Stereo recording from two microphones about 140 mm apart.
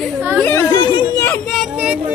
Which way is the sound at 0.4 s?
10° left (ahead or behind).